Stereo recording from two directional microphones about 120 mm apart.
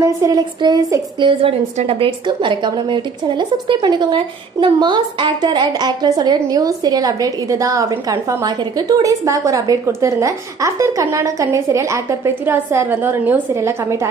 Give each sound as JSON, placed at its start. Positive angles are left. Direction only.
{"t": 0.0, "sound": "a woman's voice", "side_deg": -25}
{"t": 1.8, "sound": "a woman's voice", "side_deg": -55}